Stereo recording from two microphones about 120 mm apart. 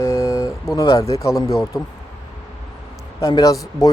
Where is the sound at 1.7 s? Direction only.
35° left (ahead or behind).